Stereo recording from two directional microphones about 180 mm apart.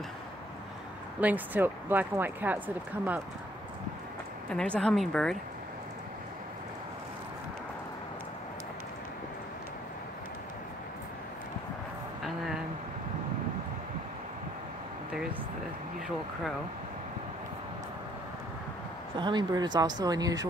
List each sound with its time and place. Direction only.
1.2 s speech: 10° right (ahead or behind)
4.5 s speech: 5° left (ahead or behind)
19.1 s speech: 25° right (ahead or behind)